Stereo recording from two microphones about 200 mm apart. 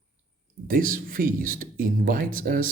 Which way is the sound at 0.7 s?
45° right (ahead or behind).